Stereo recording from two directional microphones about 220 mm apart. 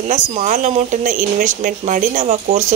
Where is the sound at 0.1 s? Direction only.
35° right (ahead or behind).